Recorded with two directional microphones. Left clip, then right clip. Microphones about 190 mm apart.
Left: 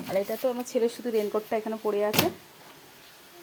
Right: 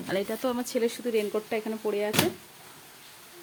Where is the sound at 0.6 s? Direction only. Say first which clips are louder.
Left 1 dB; 5° right (ahead or behind).